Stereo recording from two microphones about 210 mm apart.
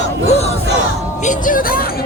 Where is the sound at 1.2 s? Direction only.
40° left (ahead or behind).